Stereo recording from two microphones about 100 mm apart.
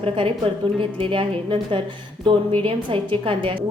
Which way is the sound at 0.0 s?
70° right (ahead or behind).